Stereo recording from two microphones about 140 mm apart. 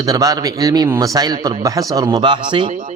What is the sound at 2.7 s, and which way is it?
Speech, 70° right (ahead or behind).